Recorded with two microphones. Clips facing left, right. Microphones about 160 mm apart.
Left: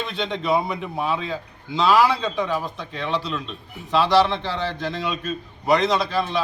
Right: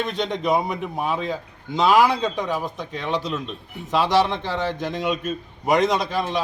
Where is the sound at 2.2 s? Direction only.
45° right (ahead or behind).